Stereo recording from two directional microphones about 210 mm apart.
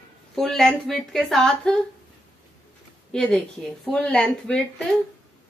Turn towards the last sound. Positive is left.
turn(degrees=5)  # may be behind; listen again after turning